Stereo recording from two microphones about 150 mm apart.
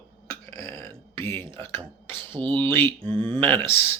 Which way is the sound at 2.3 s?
35° right (ahead or behind).